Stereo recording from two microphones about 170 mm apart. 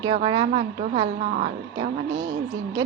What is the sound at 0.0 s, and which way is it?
A woman's voice, 25° right (ahead or behind).